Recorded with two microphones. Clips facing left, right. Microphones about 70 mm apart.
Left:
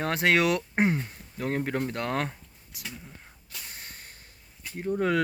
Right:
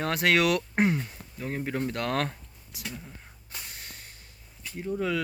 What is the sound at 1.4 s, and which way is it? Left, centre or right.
Speech, left.